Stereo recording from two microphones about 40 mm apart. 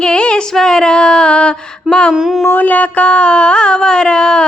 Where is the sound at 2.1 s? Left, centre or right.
Centre.